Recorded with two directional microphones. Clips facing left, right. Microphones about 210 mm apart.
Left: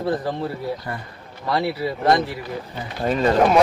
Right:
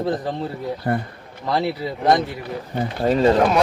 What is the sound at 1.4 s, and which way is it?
Speech, 20° right (ahead or behind).